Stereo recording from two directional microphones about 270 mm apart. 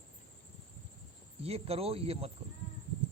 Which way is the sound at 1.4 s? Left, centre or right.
Right.